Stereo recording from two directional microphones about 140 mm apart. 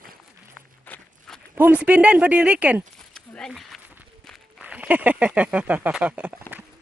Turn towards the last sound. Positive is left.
turn(degrees=-10)  # may be behind; listen again after turning